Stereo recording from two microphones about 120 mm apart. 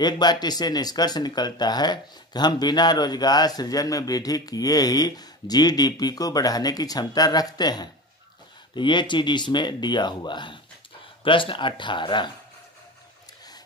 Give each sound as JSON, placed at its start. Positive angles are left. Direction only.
{"t": 0.0, "sound": "speech", "side_deg": 35}